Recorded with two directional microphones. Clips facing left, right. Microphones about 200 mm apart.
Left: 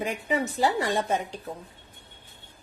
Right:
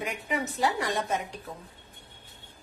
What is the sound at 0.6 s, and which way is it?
Speech, 30° left (ahead or behind).